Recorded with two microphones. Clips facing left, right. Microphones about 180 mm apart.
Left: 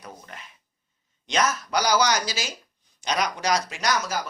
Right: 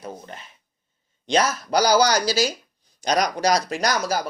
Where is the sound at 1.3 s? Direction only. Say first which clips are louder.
Right 4 dB; 30° right (ahead or behind).